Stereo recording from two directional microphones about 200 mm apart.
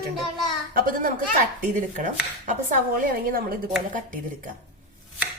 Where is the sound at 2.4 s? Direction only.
40° right (ahead or behind).